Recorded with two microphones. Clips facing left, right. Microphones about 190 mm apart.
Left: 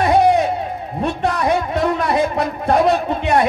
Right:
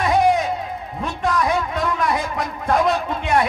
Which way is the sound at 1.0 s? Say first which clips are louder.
Left 3 dB; 30° left (ahead or behind).